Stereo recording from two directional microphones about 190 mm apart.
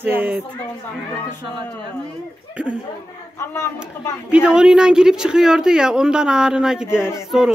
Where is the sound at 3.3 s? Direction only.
15° left (ahead or behind).